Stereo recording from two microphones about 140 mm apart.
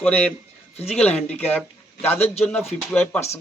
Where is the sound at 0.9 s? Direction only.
10° left (ahead or behind).